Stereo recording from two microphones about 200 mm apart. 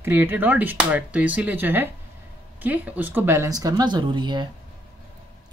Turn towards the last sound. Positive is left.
turn(degrees=-25)  # may be behind; listen again after turning